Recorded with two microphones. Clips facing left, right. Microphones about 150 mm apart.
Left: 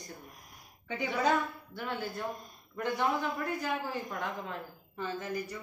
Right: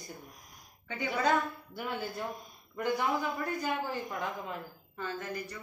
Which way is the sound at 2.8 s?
Centre (ahead or behind).